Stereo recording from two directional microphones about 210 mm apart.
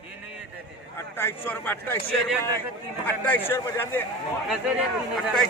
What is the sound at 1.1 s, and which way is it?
Speech, 10° left (ahead or behind).